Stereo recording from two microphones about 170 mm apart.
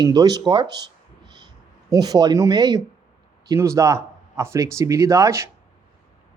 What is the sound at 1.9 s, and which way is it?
Speech, 20° right (ahead or behind).